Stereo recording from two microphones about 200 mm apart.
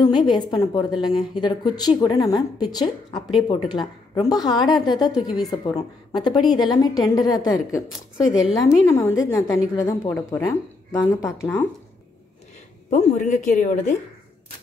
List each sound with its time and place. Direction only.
0.0 s a woman's voice: 20° left (ahead or behind)
12.9 s a woman's voice: 35° left (ahead or behind)